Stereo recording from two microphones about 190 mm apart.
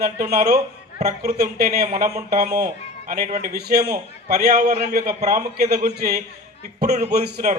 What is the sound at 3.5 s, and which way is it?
A man's voice, 55° right (ahead or behind).